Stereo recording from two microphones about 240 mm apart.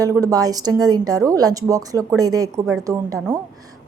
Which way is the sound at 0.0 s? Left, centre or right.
Centre.